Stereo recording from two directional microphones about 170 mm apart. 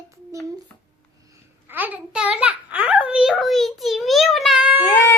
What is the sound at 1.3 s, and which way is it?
Babbling, 10° right (ahead or behind).